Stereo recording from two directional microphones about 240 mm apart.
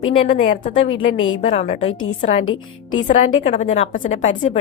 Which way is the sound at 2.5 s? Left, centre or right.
Left.